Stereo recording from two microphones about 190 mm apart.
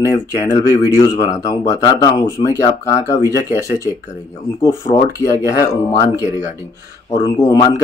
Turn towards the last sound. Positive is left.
turn(degrees=20)  # may be behind; listen again after turning